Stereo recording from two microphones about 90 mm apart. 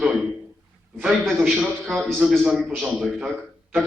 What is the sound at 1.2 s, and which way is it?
Speech, centre (ahead or behind).